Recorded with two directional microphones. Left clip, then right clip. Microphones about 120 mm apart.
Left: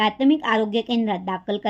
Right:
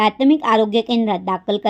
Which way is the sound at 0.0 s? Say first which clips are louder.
Right 4 dB; 40° right (ahead or behind).